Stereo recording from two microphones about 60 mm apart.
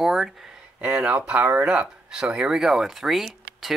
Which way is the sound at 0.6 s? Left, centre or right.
Centre.